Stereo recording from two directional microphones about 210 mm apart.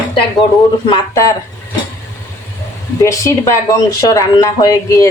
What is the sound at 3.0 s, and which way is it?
Speech, 15° left (ahead or behind).